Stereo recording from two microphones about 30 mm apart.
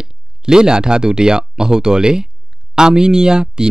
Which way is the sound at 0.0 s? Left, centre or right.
Right.